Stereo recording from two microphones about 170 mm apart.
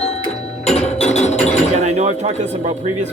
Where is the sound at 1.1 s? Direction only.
40° left (ahead or behind).